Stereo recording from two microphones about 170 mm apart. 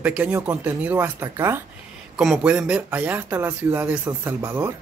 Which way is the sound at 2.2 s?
5° right (ahead or behind).